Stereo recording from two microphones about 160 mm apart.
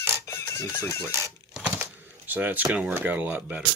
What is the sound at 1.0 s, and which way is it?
Typewriter, 15° right (ahead or behind).